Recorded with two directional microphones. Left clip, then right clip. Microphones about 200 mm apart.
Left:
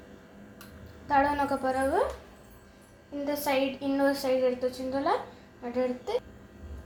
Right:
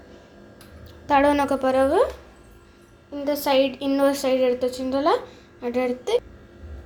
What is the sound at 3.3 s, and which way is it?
A woman's voice, 55° right (ahead or behind).